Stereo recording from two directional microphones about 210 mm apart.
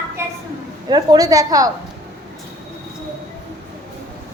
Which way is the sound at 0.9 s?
20° right (ahead or behind).